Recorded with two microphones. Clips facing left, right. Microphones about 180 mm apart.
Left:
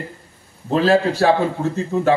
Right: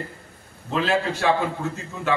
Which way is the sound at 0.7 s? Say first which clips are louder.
Left 7 dB; 35° left (ahead or behind).